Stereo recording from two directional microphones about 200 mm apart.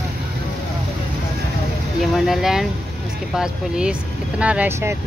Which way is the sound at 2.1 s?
Centre (ahead or behind).